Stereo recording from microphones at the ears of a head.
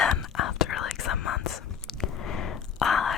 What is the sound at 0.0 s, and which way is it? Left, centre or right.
Whispering, left.